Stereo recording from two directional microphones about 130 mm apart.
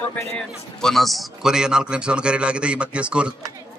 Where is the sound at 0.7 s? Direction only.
5° left (ahead or behind).